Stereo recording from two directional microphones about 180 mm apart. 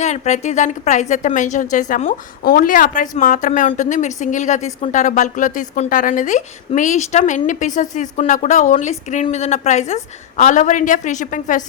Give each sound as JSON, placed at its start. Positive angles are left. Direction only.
{"t": 0.0, "sound": "a woman's voice", "side_deg": 40}